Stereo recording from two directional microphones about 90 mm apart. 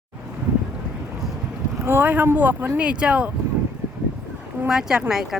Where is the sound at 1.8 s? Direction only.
25° right (ahead or behind).